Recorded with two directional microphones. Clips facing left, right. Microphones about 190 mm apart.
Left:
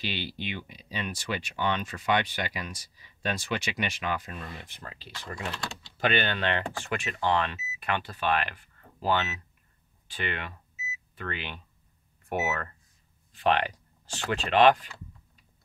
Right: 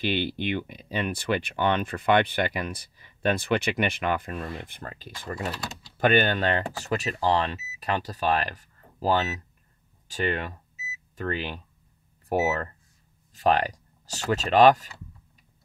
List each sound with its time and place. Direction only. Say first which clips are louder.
0.0 s speech: right 8 dB; 55° right (ahead or behind)
10.0 s microwave oven: right 7 dB; 40° right (ahead or behind)
12.3 s speech: right 5 dB; 35° right (ahead or behind)